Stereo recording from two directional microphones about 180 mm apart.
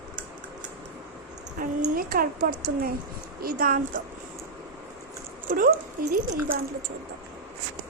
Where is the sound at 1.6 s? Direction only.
50° right (ahead or behind).